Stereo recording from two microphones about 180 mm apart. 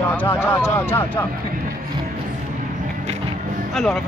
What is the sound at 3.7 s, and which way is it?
Speech, centre (ahead or behind).